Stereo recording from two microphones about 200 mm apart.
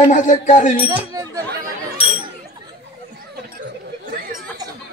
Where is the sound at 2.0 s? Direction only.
30° left (ahead or behind).